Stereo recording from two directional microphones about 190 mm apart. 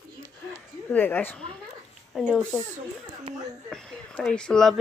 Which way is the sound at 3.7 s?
Centre (ahead or behind).